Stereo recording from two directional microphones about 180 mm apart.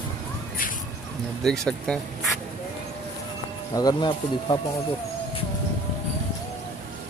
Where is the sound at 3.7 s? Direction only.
20° left (ahead or behind).